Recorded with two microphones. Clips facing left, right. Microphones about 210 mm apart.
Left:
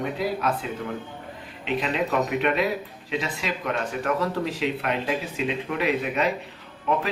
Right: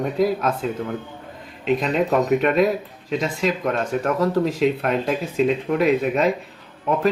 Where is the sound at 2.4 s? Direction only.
40° right (ahead or behind).